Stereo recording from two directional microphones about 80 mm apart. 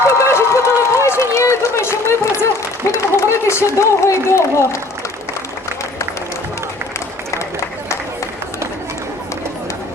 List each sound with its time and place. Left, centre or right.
0.1 s run: left